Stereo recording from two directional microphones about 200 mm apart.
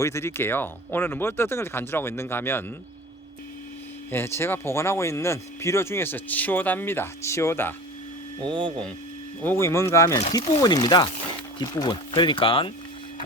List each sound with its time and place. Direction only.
0.0 s speech: 15° left (ahead or behind)
4.1 s speech: 10° left (ahead or behind)
8.4 s speech: 25° right (ahead or behind)
9.4 s speech: 10° left (ahead or behind); by 12.7 s 25° left (ahead or behind)